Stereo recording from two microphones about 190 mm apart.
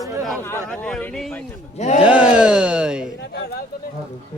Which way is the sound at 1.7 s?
35° left (ahead or behind).